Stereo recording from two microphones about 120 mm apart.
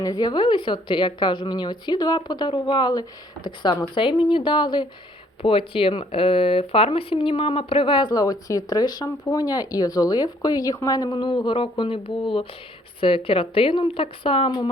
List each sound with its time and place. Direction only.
0.0 s a woman's voice: 35° left (ahead or behind)